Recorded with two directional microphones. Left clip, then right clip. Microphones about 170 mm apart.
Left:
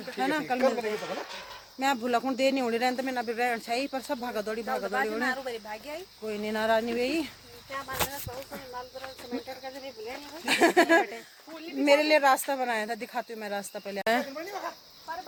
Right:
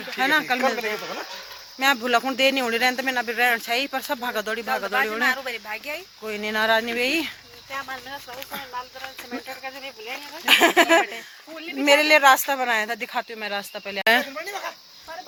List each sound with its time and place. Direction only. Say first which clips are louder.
0.2 s speech: right 6 dB; 5° right (ahead or behind)
2.0 s speech: right 6 dB; centre (ahead or behind)
5.6 s speech: right 7 dB; 20° left (ahead or behind)
6.2 s speech: right 6 dB; 5° right (ahead or behind)
9.6 s speech: right 5 dB; 20° left (ahead or behind)
10.4 s speech: right 6 dB; centre (ahead or behind)
14.3 s speech: right 5 dB; 40° left (ahead or behind)